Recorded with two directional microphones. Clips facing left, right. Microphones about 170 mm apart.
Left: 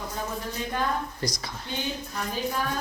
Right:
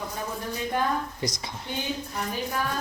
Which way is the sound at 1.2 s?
25° right (ahead or behind).